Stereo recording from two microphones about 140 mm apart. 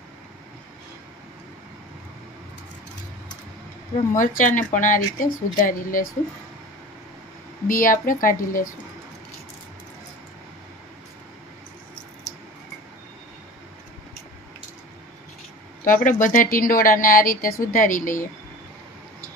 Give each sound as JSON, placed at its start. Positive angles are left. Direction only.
{"t": 4.2, "sound": "a woman's voice", "side_deg": 70}
{"t": 7.7, "sound": "a woman's voice", "side_deg": 80}
{"t": 15.8, "sound": "speech", "side_deg": 75}